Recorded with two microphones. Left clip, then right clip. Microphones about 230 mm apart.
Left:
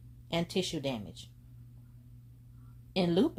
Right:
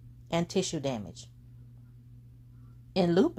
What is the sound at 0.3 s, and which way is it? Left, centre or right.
Speech, right.